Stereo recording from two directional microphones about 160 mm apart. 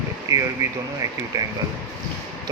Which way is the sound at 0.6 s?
20° right (ahead or behind).